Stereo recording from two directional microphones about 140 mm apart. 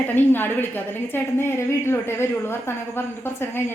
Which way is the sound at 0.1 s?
15° left (ahead or behind).